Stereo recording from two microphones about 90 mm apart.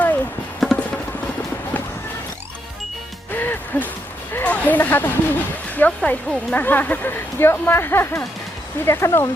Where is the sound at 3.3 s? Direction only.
20° left (ahead or behind).